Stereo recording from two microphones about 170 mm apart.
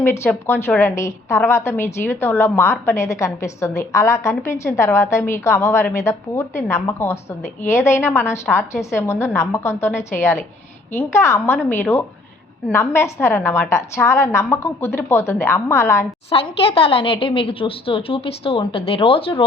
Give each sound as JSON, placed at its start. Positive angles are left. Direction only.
{"t": 0.0, "sound": "a woman's voice", "side_deg": 15}
{"t": 16.3, "sound": "a woman's voice", "side_deg": 35}